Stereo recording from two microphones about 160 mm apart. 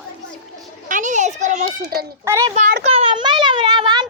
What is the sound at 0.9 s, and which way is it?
Children playing, 55° right (ahead or behind).